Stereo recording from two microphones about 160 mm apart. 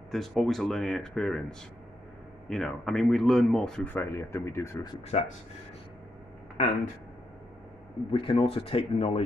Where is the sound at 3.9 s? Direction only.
15° left (ahead or behind).